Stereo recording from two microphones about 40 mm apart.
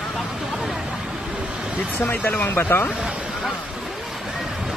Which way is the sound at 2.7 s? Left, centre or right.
Left.